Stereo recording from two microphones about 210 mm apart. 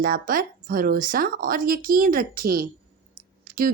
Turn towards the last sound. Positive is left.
turn(degrees=-45)  # may be behind; listen again after turning